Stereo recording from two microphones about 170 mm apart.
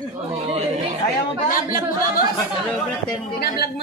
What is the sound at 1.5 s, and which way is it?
Speech, 55° left (ahead or behind).